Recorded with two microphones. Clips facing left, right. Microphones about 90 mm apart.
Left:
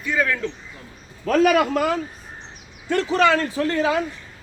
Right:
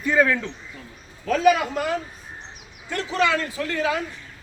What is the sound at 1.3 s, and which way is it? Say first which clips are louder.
Speech: left 2 dB; 55° left (ahead or behind).